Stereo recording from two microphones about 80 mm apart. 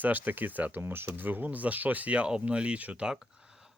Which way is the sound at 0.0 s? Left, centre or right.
Right.